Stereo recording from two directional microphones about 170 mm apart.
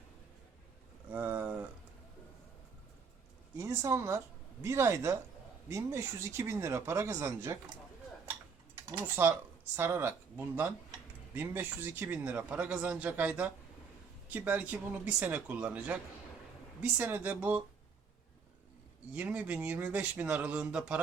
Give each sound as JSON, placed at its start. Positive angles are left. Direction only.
{"t": 1.1, "sound": "a sound", "side_deg": -10}
{"t": 3.6, "sound": "a man's voice", "side_deg": -15}
{"t": 8.9, "sound": "a man's voice", "side_deg": -15}
{"t": 19.1, "sound": "a man's voice", "side_deg": -10}